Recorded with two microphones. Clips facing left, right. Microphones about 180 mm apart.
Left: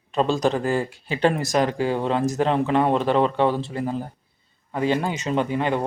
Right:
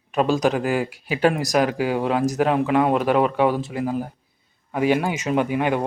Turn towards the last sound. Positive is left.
turn(degrees=-10)  # may be behind; listen again after turning